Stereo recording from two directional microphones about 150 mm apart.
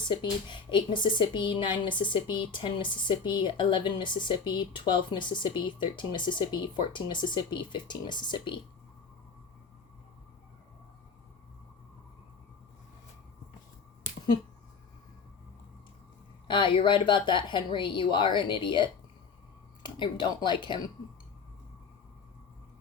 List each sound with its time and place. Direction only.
0.1 s speech: 30° left (ahead or behind)
16.5 s speech: 35° left (ahead or behind)